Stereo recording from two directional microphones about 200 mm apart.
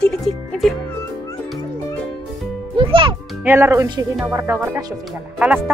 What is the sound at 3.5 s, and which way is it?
Speech, 15° right (ahead or behind).